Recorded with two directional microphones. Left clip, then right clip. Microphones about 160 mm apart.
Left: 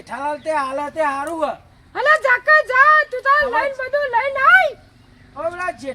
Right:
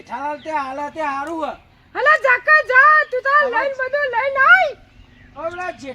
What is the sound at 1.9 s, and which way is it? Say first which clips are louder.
A woman's voice: right 1 dB; 65° right (ahead or behind).